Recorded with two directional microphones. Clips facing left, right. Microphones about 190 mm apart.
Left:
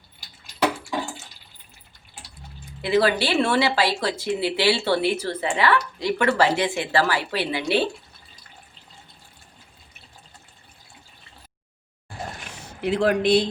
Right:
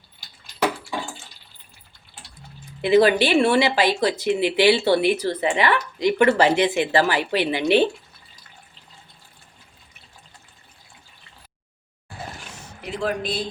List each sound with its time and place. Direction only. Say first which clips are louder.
2.8 s speech: right 4 dB; 20° right (ahead or behind)
12.8 s speech: left 6 dB; 70° left (ahead or behind)